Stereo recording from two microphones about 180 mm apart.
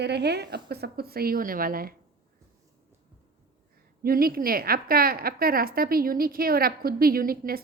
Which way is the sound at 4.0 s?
55° right (ahead or behind).